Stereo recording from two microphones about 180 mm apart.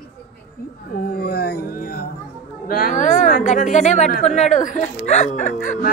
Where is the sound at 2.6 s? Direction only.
50° left (ahead or behind).